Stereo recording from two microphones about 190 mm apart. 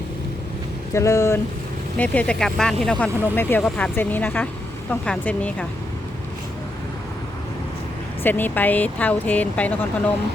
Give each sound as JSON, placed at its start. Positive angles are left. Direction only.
{"t": 0.9, "sound": "speech", "side_deg": 15}
{"t": 8.2, "sound": "speech", "side_deg": 10}